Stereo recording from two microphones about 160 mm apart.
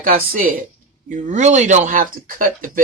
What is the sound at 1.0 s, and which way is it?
Speech, 50° right (ahead or behind).